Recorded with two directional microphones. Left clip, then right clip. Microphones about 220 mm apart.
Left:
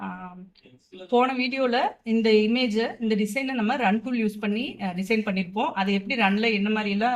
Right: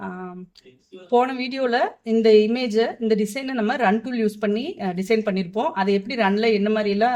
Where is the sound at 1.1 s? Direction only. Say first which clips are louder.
Right 2 dB; 55° right (ahead or behind).